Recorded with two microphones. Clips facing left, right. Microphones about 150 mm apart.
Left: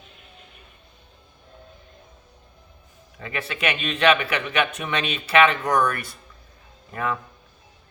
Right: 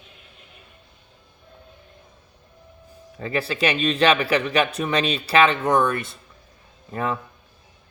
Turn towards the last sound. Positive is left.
turn(degrees=-30)  # may be behind; listen again after turning